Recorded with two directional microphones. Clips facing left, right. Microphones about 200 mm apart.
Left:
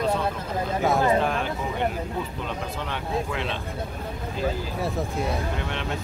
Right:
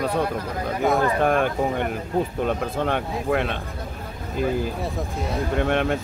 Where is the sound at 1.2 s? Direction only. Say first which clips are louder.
Right 6 dB; 55° right (ahead or behind).